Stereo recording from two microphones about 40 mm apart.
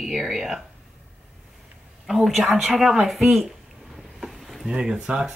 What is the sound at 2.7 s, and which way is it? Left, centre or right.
Speech, centre.